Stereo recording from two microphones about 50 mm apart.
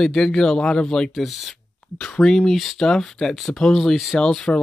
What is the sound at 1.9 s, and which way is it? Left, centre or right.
Speech, centre.